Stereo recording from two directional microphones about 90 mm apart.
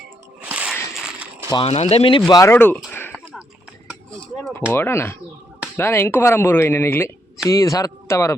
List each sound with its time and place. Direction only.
0.4 s a sound: 15° right (ahead or behind)
1.5 s speech: 80° left
2.2 s speech: 35° left (ahead or behind)
2.6 s a sound: 20° left (ahead or behind)
4.7 s speech: 25° left (ahead or behind)
7.4 s speech: 40° left (ahead or behind)